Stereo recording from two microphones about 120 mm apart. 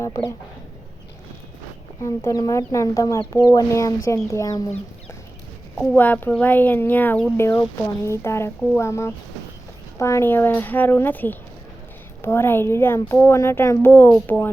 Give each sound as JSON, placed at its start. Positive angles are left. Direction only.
{"t": 0.0, "sound": "speech", "side_deg": 25}
{"t": 2.0, "sound": "speech", "side_deg": 25}
{"t": 5.9, "sound": "speech", "side_deg": 15}